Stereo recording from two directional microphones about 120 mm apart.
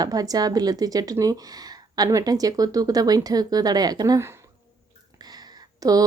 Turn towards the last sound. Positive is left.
turn(degrees=-30)  # may be behind; listen again after turning